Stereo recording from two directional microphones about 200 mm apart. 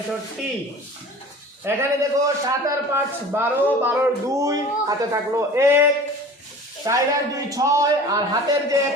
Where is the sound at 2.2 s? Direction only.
15° right (ahead or behind).